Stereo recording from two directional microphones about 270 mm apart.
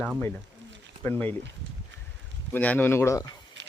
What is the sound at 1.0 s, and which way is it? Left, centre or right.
Speech, centre.